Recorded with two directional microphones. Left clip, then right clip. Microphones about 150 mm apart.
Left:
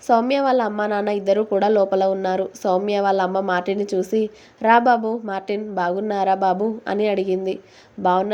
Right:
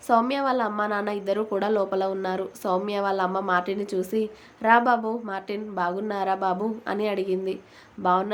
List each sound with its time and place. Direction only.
0.1 s a woman's voice: 25° left (ahead or behind)